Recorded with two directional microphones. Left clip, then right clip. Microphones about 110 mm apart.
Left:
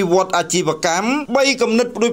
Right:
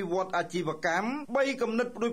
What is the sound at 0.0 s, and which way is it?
Speech, 25° left (ahead or behind).